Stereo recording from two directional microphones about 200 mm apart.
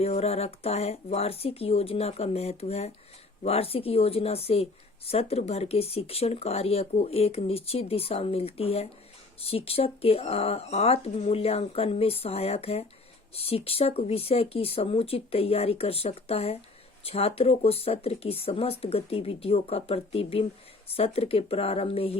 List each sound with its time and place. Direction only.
0.0 s speech: 30° left (ahead or behind)